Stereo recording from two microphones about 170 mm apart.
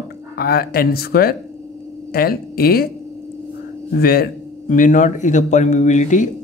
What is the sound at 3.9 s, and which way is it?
A man's voice, 60° left (ahead or behind).